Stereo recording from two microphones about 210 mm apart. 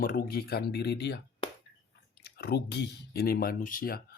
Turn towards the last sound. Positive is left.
turn(degrees=45)  # may be behind; listen again after turning